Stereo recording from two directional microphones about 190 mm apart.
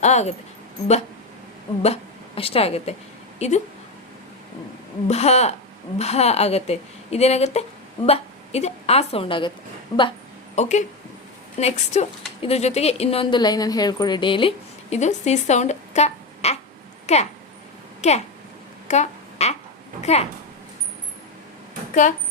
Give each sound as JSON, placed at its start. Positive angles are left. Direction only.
{"t": 0.0, "sound": "speech", "side_deg": 35}
{"t": 1.8, "sound": "a woman's voice", "side_deg": 30}
{"t": 5.0, "sound": "a woman's voice", "side_deg": 35}
{"t": 10.5, "sound": "speech", "side_deg": 40}
{"t": 18.9, "sound": "a sound", "side_deg": 35}
{"t": 20.0, "sound": "a woman's voice", "side_deg": 35}